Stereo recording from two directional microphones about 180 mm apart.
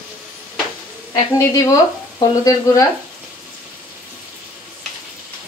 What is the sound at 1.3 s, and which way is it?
Speech, 20° left (ahead or behind).